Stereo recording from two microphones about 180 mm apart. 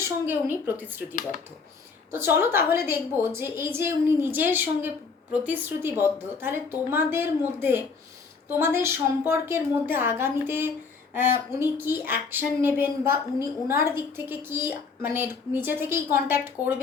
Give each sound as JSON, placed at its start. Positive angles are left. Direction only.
{"t": 0.0, "sound": "a woman's voice", "side_deg": -10}
{"t": 2.1, "sound": "a woman's voice", "side_deg": -15}